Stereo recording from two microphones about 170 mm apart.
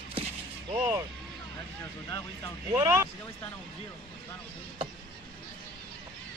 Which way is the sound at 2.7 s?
15° right (ahead or behind).